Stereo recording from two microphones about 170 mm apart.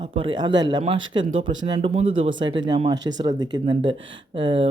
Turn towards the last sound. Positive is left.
turn(degrees=-30)  # may be behind; listen again after turning